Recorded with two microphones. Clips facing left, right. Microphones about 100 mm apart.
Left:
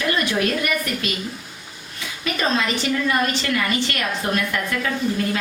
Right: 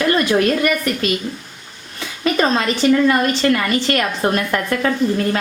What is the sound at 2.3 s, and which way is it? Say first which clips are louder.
A woman's voice: right 5 dB; 40° right (ahead or behind).